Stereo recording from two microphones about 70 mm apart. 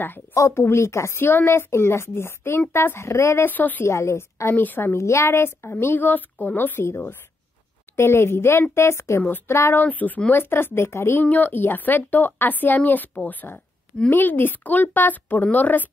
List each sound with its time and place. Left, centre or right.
0.3 s a woman's voice: left
3.4 s a woman's voice: left
3.8 s a woman's voice: left
4.6 s a woman's voice: left
4.9 s a woman's voice: left
9.8 s a woman's voice: left
11.2 s a woman's voice: left